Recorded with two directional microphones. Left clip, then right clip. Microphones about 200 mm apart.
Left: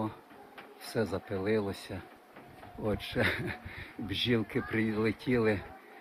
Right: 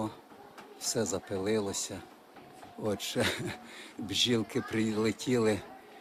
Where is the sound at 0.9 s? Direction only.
10° right (ahead or behind).